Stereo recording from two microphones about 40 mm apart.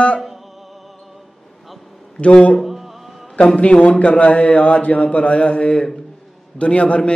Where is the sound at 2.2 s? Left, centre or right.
Left.